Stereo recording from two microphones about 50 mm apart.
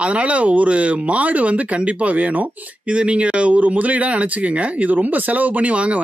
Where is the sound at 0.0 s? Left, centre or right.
Right.